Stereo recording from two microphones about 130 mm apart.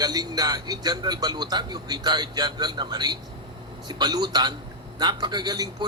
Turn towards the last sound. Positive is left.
turn(degrees=-35)  # may be behind; listen again after turning